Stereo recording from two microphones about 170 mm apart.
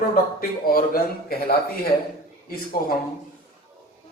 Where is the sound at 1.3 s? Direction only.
65° left (ahead or behind).